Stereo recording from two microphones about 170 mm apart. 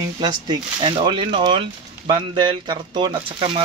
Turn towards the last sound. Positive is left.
turn(degrees=-30)  # may be behind; listen again after turning